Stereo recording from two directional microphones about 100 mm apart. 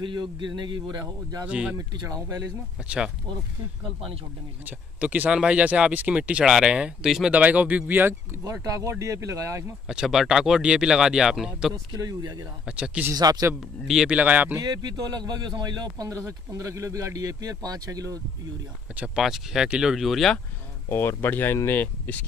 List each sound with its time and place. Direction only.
0.0 s speech: 50° right (ahead or behind)
1.5 s speech: 10° right (ahead or behind)
1.8 s speech: 35° right (ahead or behind)
4.6 s speech: 15° right (ahead or behind)
8.5 s speech: 30° right (ahead or behind)
9.8 s speech: 5° right (ahead or behind)
12.0 s speech: 40° right (ahead or behind)
12.6 s speech: 10° right (ahead or behind)
13.1 s speech: 40° right (ahead or behind)
13.8 s speech: 5° right (ahead or behind)
14.1 s speech: 15° right (ahead or behind)
14.6 s speech: 40° right (ahead or behind)
18.9 s speech: 5° right (ahead or behind)
20.9 s speech: 25° left (ahead or behind)